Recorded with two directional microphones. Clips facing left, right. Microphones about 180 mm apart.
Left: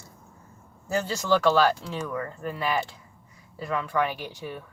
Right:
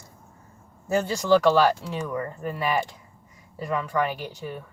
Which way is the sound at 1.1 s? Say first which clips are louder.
Right 3 dB; 15° right (ahead or behind).